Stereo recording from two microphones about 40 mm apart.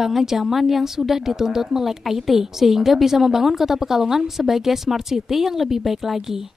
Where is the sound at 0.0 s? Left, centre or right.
Centre.